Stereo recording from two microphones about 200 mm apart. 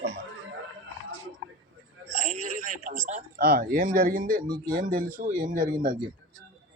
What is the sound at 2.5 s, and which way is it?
A man's voice, 40° right (ahead or behind).